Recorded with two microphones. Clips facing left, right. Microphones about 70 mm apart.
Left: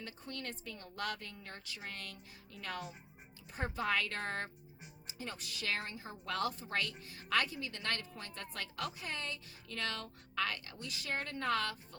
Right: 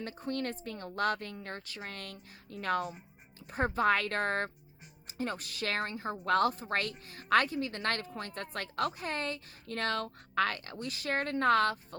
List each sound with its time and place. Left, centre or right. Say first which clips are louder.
0.0 s speech: right 9 dB; right